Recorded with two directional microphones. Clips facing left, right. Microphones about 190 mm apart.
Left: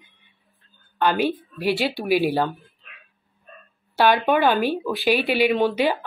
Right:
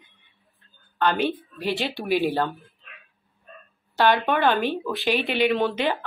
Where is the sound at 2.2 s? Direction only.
15° left (ahead or behind).